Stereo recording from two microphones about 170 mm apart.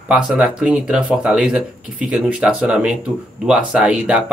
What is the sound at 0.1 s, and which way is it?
Speech, 5° right (ahead or behind).